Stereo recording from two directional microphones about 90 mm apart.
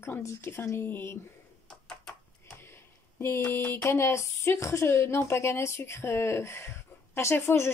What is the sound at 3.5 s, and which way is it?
Speech, 25° left (ahead or behind).